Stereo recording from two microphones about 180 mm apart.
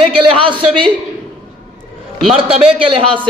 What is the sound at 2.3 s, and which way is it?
Speech, 30° right (ahead or behind).